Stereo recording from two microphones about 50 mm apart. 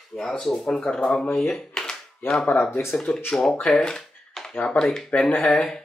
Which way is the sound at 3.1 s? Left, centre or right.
Left.